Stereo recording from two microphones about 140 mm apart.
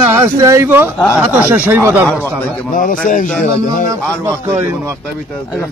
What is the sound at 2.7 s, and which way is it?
Speech, 70° left (ahead or behind).